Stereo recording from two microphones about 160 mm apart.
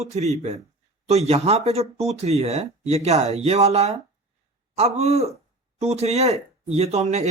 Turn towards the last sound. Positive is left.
turn(degrees=-45)  # may be behind; listen again after turning